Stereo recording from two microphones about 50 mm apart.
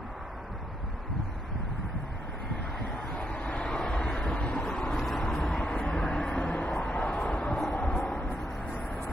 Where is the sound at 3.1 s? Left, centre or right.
Left.